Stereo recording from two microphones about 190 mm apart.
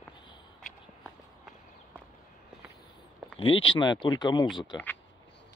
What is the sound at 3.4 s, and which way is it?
Speech, 25° left (ahead or behind).